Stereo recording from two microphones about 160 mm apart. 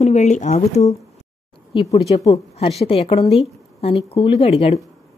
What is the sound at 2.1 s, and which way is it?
Speech, 40° left (ahead or behind).